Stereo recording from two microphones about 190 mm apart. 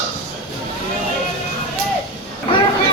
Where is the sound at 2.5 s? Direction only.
25° left (ahead or behind).